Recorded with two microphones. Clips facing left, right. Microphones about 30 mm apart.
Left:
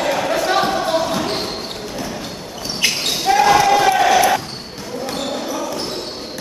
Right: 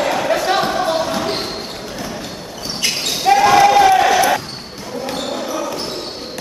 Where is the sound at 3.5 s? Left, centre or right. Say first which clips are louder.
Right 3 dB; centre.